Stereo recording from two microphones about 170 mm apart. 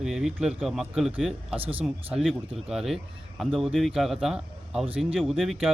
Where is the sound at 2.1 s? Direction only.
Centre (ahead or behind).